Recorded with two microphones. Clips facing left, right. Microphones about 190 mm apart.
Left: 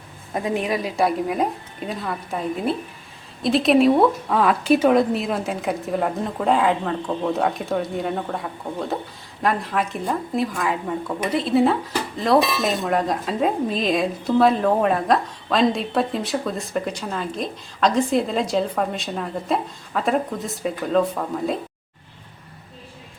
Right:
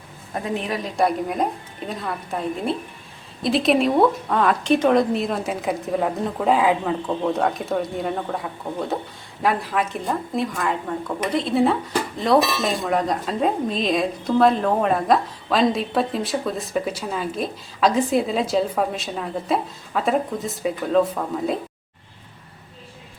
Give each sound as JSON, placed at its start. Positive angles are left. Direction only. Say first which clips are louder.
{"t": 0.5, "sound": "a woman's voice", "louder": "left 2 dB", "side_deg": 15}